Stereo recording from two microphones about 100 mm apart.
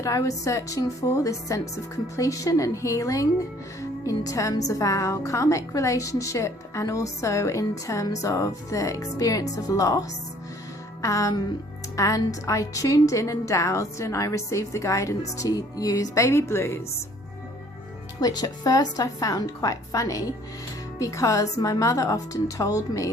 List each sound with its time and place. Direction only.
0.0 s a woman's voice: 35° left (ahead or behind)
18.2 s a woman's voice: 40° left (ahead or behind)